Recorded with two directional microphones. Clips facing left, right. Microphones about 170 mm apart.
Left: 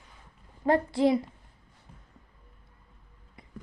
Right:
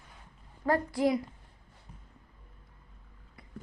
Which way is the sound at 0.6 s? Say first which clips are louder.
Left 4 dB; 25° left (ahead or behind).